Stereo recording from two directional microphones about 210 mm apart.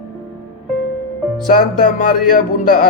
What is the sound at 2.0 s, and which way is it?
Speech, 45° left (ahead or behind).